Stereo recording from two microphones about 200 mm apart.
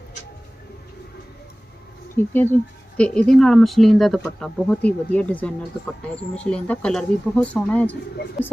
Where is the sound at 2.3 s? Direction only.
10° left (ahead or behind).